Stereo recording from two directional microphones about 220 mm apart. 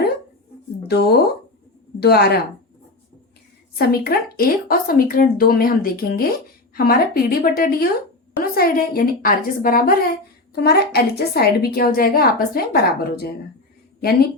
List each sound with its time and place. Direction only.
0.9 s a woman's voice: 45° left (ahead or behind)
3.8 s a woman's voice: 45° left (ahead or behind)